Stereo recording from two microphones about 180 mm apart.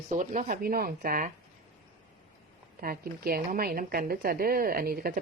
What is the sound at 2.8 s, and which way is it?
A woman's voice, 55° right (ahead or behind).